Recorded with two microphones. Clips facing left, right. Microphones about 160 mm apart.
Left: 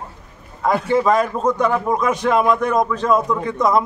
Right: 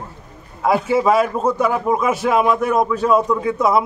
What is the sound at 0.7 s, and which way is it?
A man's voice, 5° right (ahead or behind).